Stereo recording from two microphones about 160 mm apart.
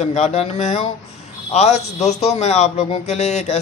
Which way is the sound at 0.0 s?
45° left (ahead or behind).